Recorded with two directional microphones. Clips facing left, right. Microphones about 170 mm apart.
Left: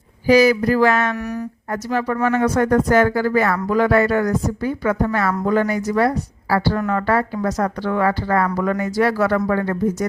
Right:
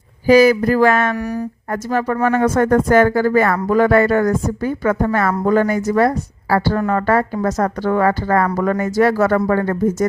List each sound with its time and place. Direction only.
0.3 s speech: 50° right (ahead or behind)
1.1 s speech: 30° right (ahead or behind)
1.7 s speech: 50° right (ahead or behind)